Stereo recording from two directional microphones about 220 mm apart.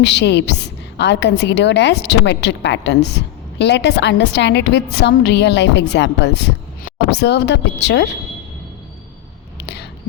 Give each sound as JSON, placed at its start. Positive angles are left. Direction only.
{"t": 0.0, "sound": "a woman's voice", "side_deg": 50}
{"t": 9.6, "sound": "whispering", "side_deg": 50}